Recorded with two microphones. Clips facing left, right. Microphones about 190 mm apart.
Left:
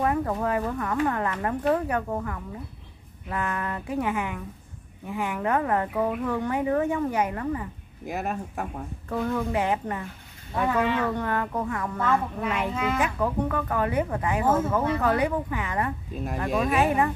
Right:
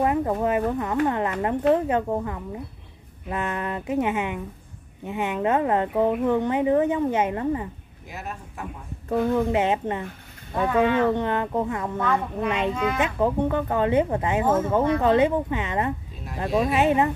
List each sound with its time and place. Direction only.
0.0 s speech: 20° right (ahead or behind)
8.1 s speech: 50° left (ahead or behind)
9.1 s speech: 25° right (ahead or behind)
10.5 s speech: centre (ahead or behind)
11.0 s speech: 20° right (ahead or behind)
12.0 s speech: 5° left (ahead or behind)
12.4 s speech: 20° right (ahead or behind)